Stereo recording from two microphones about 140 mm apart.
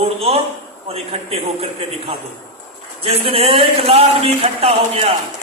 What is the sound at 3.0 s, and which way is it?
A man's voice, 45° right (ahead or behind).